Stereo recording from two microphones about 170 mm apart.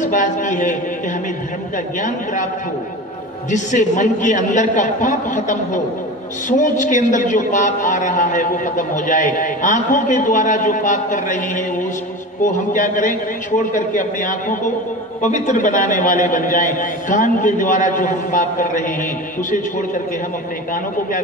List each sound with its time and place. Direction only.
0.0 s a man's voice: 50° left (ahead or behind)
2.0 s a man's voice: 50° left (ahead or behind)
3.5 s a man's voice: 45° left (ahead or behind)
12.7 s a man's voice: 50° left (ahead or behind)